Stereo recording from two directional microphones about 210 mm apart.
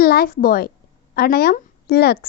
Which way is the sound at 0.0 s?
45° left (ahead or behind).